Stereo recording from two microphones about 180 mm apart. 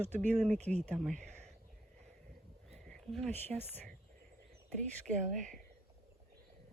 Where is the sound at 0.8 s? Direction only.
5° left (ahead or behind).